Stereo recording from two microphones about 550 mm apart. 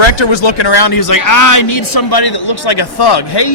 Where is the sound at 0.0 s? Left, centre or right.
Left.